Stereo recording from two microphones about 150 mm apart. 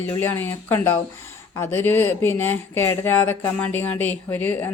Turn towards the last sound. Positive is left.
turn(degrees=10)  # may be behind; listen again after turning